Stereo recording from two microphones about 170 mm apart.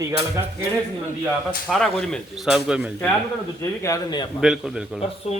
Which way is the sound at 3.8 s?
20° left (ahead or behind).